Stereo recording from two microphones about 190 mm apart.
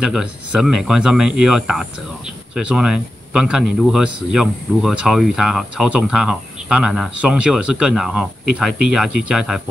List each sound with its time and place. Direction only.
0.0 s speech: 5° right (ahead or behind)